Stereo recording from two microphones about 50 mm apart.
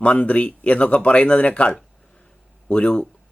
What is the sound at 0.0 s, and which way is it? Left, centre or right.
Speech, left.